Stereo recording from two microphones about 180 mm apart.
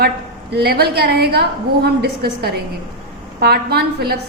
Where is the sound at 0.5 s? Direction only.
60° right (ahead or behind).